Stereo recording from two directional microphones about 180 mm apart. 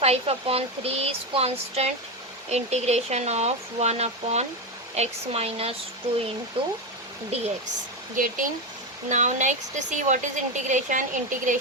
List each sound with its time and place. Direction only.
0.0 s speech: 35° right (ahead or behind)
8.1 s a woman's voice: 45° right (ahead or behind)